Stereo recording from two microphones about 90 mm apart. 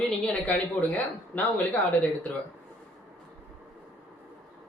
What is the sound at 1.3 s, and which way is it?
Speech, 20° left (ahead or behind).